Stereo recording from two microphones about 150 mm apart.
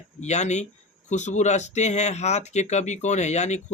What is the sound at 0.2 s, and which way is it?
Speech, 50° left (ahead or behind).